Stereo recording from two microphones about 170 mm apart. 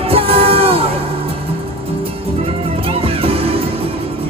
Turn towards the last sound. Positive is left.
turn(degrees=-35)  # may be behind; listen again after turning